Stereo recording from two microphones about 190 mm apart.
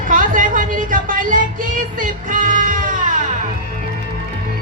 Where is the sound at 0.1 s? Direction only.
45° right (ahead or behind).